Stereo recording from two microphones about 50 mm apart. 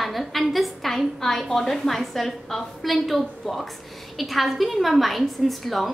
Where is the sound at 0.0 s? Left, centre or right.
Centre.